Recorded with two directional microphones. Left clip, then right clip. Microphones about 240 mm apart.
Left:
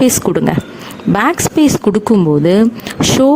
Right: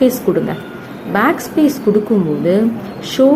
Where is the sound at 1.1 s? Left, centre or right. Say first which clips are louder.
Left 2 dB; left.